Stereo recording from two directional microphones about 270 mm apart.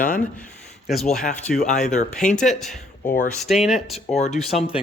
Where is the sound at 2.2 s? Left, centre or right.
Centre.